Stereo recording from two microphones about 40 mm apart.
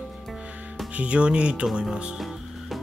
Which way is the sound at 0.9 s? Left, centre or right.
Right.